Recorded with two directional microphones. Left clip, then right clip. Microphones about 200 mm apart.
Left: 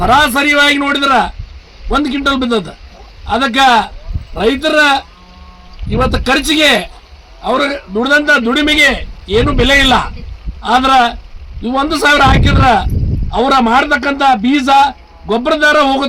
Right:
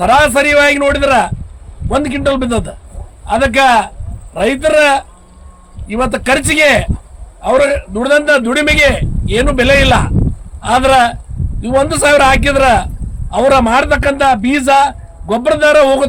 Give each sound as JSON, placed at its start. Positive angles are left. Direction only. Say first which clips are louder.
{"t": 0.0, "sound": "a man's voice", "louder": "right 1 dB", "side_deg": -25}